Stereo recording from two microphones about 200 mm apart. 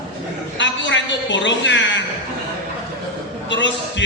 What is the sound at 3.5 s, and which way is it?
Speech, 65° left (ahead or behind).